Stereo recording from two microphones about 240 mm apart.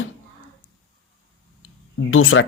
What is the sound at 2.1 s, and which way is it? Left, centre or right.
Speech, left.